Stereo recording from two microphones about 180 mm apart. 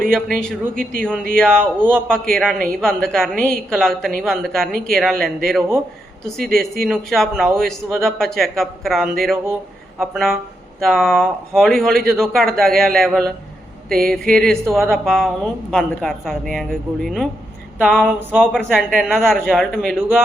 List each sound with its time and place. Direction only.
0.1 s a woman's voice: 5° left (ahead or behind)